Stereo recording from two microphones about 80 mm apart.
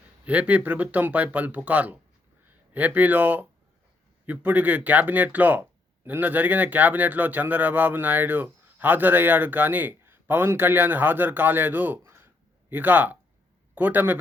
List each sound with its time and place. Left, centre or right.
0.3 s speech: centre
12.0 s a sound: right
12.7 s speech: right